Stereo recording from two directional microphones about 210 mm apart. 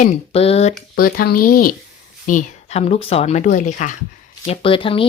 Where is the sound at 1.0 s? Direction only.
45° left (ahead or behind).